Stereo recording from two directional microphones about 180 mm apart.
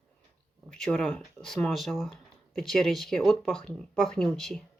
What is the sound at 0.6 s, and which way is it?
Speech, 5° left (ahead or behind).